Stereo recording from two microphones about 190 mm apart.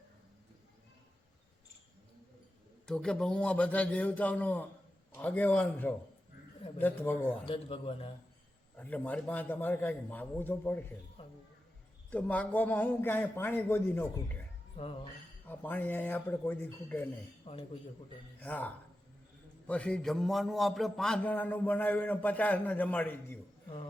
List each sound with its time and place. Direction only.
2.8 s a man's voice: 5° left (ahead or behind)
7.4 s a man's voice: 30° left (ahead or behind)
8.8 s a man's voice: 10° left (ahead or behind)
11.2 s a sound: 25° left (ahead or behind)
12.1 s a man's voice: 10° left (ahead or behind)
15.4 s a man's voice: 10° left (ahead or behind)
17.4 s a man's voice: 30° left (ahead or behind)
18.3 s a man's voice: 10° left (ahead or behind)